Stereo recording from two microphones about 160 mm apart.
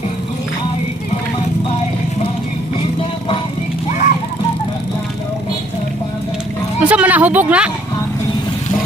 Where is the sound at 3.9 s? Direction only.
50° left (ahead or behind).